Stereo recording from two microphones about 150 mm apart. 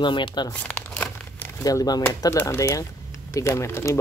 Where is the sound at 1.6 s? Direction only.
25° left (ahead or behind).